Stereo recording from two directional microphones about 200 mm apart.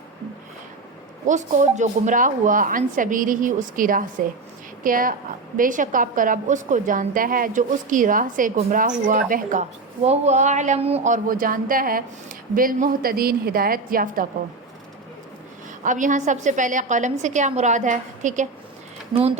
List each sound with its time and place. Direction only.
1.3 s a woman's voice: 35° right (ahead or behind)
15.8 s a woman's voice: 40° right (ahead or behind)